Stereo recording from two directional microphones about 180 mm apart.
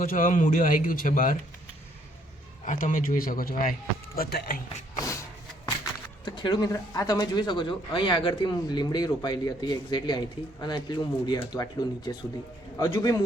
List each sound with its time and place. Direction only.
0.0 s speech: 45° left (ahead or behind)
2.6 s speech: 45° left (ahead or behind)
5.8 s speech: 25° left (ahead or behind)